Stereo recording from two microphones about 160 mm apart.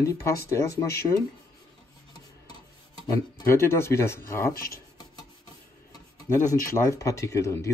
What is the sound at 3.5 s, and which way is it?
Speech, 15° left (ahead or behind).